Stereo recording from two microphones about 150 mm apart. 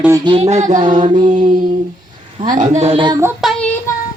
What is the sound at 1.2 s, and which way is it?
Mantra, 60° right (ahead or behind).